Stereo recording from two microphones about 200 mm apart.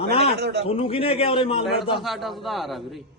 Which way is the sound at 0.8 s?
30° left (ahead or behind).